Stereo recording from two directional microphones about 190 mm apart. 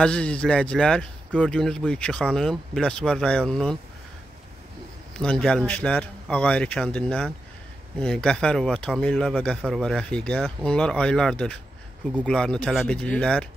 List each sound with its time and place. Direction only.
0.0 s speech: 5° left (ahead or behind)
5.2 s speech: 5° left (ahead or behind)